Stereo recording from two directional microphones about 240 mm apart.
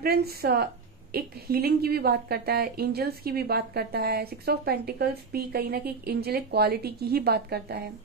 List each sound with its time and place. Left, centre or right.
0.0 s a woman's voice: right